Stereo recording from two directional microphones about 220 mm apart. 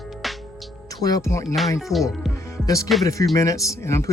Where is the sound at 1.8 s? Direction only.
Centre (ahead or behind).